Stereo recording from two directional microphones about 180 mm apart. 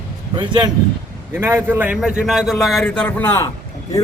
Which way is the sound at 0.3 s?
25° right (ahead or behind).